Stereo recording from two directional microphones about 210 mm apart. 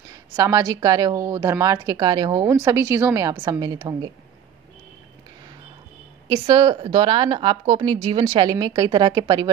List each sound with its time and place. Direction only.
0.4 s a woman's voice: 15° right (ahead or behind)
6.2 s speech: 20° right (ahead or behind)